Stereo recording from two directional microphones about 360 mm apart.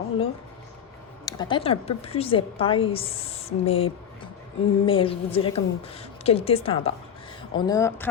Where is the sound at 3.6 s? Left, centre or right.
Centre.